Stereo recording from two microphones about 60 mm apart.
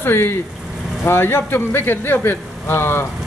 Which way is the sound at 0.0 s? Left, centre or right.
Left.